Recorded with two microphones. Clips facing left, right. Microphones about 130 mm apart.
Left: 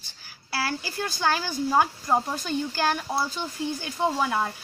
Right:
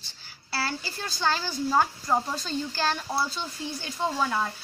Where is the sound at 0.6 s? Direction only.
15° left (ahead or behind).